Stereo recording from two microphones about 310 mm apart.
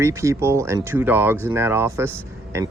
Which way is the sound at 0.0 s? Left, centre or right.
Centre.